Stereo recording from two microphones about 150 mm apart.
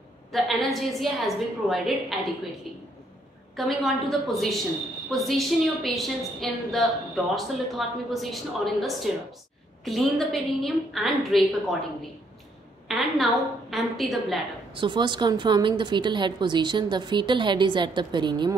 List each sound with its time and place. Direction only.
0.3 s a woman's voice: centre (ahead or behind)
12.8 s a woman's voice: centre (ahead or behind)
14.7 s a woman's voice: 35° right (ahead or behind)